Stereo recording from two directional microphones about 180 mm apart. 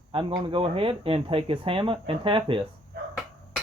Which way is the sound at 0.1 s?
30° right (ahead or behind).